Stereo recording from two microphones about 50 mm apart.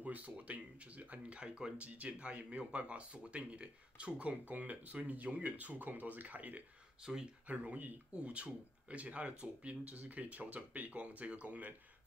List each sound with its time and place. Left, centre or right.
0.0 s speech: right
7.0 s speech: centre
7.4 s speech: right